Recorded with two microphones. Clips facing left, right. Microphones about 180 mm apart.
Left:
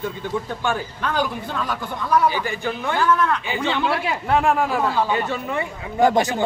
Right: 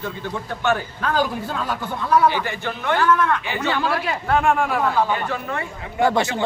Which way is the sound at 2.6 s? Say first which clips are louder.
Right 2 dB; 10° left (ahead or behind).